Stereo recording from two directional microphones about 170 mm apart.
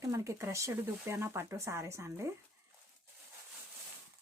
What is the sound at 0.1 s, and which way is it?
Speech, 15° right (ahead or behind).